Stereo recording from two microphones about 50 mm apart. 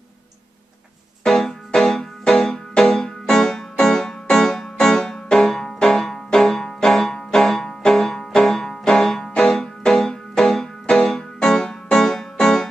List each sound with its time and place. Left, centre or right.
1.2 s music: centre